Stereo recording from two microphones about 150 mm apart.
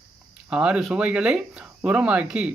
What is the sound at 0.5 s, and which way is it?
Speech, 5° right (ahead or behind).